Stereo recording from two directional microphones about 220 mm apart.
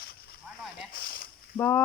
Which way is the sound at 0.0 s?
45° left (ahead or behind).